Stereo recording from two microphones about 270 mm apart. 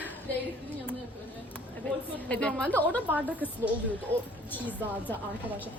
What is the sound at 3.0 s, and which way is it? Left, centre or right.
Speech, centre.